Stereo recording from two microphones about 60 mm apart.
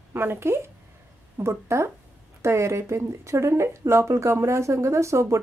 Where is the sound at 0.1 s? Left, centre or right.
Right.